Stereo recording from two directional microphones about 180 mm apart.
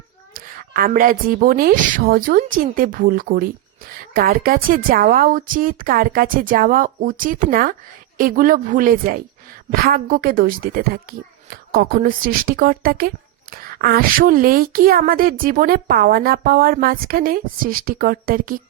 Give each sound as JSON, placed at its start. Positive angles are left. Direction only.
{"t": 0.3, "sound": "speech", "side_deg": -55}